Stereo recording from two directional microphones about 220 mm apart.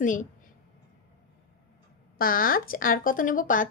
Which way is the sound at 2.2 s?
40° left (ahead or behind).